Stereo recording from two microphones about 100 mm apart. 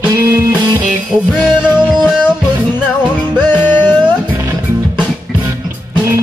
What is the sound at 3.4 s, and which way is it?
Music, 15° left (ahead or behind).